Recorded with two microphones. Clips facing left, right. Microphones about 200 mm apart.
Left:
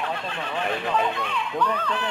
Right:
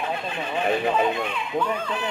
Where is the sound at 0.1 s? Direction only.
15° right (ahead or behind).